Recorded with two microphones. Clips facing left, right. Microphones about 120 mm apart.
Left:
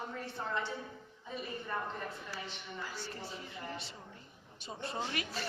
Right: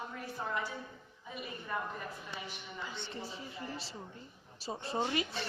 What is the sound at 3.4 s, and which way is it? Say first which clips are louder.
A woman's voice: right 1 dB; 25° right (ahead or behind).